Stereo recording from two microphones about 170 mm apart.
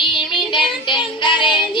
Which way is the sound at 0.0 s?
30° left (ahead or behind).